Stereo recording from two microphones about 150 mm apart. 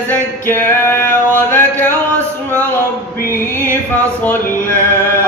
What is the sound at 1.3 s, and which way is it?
Chant, 15° left (ahead or behind).